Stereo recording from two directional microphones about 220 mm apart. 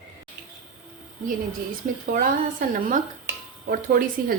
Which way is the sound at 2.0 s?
40° right (ahead or behind).